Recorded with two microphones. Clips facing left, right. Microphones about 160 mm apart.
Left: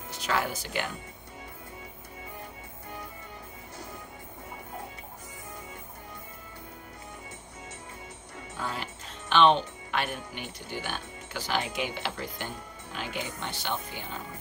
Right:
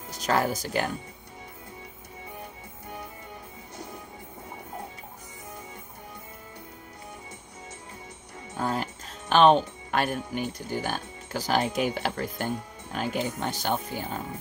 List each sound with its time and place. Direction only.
0.1 s speech: 40° right (ahead or behind)
8.5 s music: 45° right (ahead or behind)
9.3 s speech: 45° right (ahead or behind)